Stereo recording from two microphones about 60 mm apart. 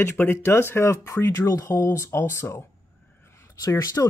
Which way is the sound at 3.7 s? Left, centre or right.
Left.